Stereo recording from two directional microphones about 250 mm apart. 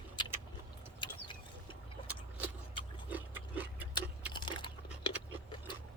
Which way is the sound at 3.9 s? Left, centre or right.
Centre.